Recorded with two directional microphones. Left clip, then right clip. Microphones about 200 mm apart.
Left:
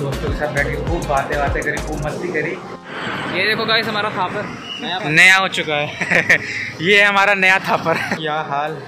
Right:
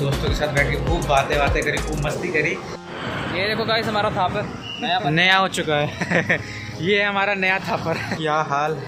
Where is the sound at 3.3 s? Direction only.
60° right (ahead or behind).